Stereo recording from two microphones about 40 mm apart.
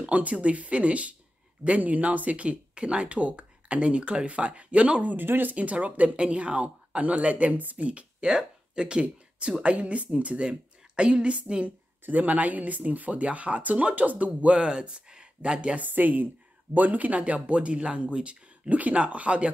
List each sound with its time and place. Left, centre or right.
0.0 s speech: right
5.1 s speech: right
5.5 s speech: right
10.4 s a sound: centre
11.1 s a woman's voice: right
11.6 s speech: right
15.7 s a woman's voice: right